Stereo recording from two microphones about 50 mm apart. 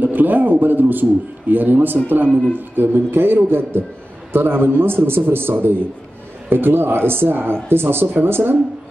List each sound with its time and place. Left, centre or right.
0.0 s a man's voice: right